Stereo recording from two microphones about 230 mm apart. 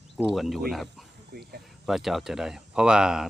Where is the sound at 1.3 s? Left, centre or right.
Right.